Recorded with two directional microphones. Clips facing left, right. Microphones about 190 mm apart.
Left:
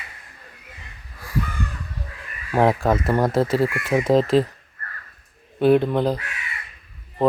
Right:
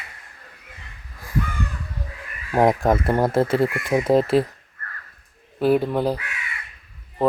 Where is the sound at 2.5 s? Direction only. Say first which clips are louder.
Right 1 dB; 15° right (ahead or behind).